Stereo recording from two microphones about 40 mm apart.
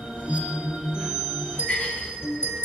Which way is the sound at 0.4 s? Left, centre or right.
Right.